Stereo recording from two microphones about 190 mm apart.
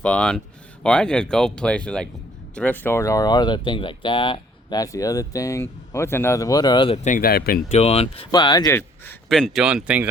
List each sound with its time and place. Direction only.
0.0 s speech: 5° left (ahead or behind); by 7.6 s 55° left (ahead or behind)
7.7 s speech: 35° left (ahead or behind)
8.7 s speech: 10° left (ahead or behind)